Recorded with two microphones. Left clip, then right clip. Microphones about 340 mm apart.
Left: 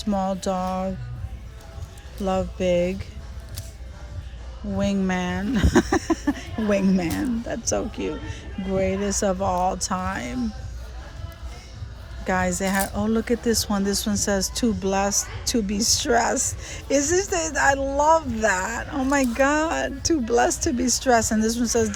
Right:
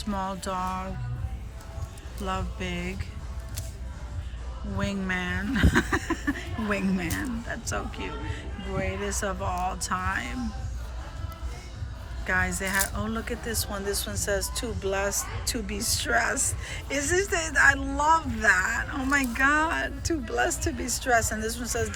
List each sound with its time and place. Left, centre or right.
0.1 s a sound: left
0.3 s speech: centre
0.6 s a sound: left
2.2 s speech: centre
4.8 s speech: centre
12.2 s speech: centre